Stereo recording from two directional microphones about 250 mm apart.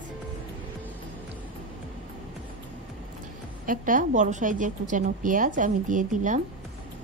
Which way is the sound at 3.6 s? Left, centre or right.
Right.